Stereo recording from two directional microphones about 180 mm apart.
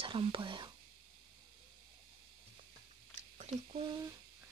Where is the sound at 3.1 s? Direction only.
40° right (ahead or behind).